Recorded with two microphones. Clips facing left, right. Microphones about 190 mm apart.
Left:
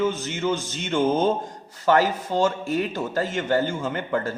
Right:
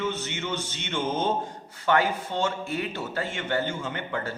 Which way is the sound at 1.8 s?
40° left (ahead or behind).